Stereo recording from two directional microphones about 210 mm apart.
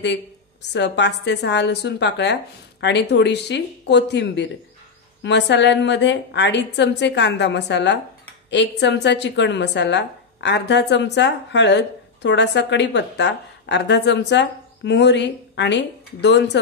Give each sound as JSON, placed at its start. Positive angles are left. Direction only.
{"t": 0.7, "sound": "a woman's voice", "side_deg": 55}